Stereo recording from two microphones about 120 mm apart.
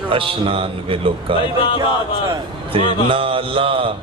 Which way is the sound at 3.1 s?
50° right (ahead or behind).